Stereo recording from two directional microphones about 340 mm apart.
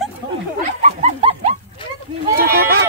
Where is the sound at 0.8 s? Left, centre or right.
Centre.